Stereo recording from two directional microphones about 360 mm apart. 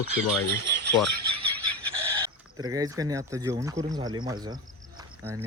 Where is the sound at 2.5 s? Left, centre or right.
Centre.